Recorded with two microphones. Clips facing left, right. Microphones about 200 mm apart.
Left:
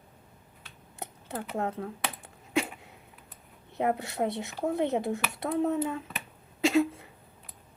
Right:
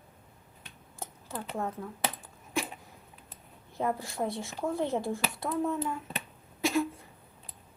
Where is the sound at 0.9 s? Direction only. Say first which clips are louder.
Left 3 dB; 70° left (ahead or behind).